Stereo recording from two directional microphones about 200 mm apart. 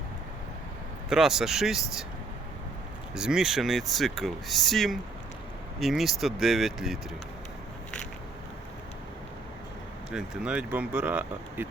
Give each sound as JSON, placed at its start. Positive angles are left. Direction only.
{"t": 1.1, "sound": "speech", "side_deg": 0}
{"t": 3.2, "sound": "speech", "side_deg": -5}
{"t": 10.1, "sound": "speech", "side_deg": -5}